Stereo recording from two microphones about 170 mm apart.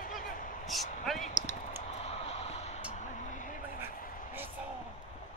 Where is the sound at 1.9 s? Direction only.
40° left (ahead or behind).